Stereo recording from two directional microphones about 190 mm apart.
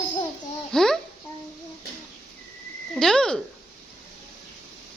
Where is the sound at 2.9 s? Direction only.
5° left (ahead or behind).